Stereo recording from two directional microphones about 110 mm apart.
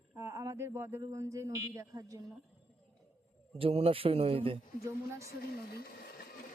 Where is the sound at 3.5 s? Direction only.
60° right (ahead or behind).